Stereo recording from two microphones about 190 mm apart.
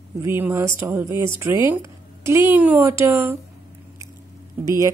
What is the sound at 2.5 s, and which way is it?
Speech, 10° right (ahead or behind).